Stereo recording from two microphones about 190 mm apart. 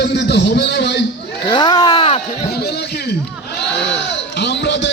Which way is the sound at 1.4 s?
25° left (ahead or behind).